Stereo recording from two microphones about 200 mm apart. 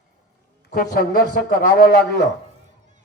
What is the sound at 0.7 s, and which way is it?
A man's voice, 45° left (ahead or behind).